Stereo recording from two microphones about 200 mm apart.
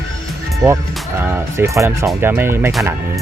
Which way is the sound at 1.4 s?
15° right (ahead or behind).